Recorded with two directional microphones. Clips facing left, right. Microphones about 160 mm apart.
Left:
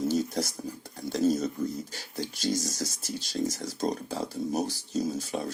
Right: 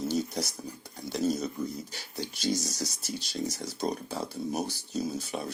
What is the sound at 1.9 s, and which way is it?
Speech, 45° left (ahead or behind).